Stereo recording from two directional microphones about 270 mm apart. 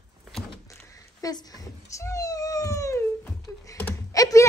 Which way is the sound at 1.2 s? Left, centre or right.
Centre.